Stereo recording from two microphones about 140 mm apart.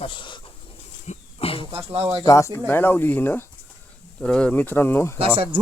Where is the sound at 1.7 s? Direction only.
40° right (ahead or behind).